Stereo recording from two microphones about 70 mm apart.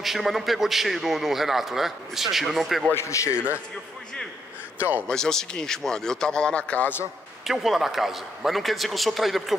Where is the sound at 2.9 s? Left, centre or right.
Left.